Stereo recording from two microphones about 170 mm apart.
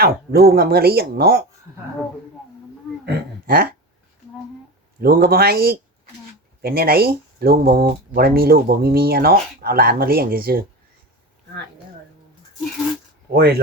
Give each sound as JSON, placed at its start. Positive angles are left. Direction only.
{"t": 0.0, "sound": "speech", "side_deg": -65}
{"t": 3.1, "sound": "a sound", "side_deg": -65}
{"t": 4.9, "sound": "speech", "side_deg": -65}
{"t": 13.3, "sound": "speech", "side_deg": -65}